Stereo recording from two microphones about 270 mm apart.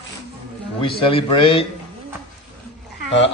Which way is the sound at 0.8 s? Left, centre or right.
Centre.